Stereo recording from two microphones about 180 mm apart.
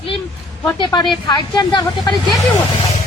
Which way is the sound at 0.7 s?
20° left (ahead or behind).